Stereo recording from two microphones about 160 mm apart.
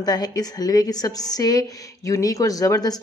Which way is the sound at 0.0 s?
25° left (ahead or behind).